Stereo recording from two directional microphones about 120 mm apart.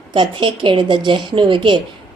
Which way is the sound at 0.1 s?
45° right (ahead or behind).